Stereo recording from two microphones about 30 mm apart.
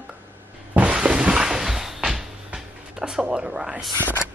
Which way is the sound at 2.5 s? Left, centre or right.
Right.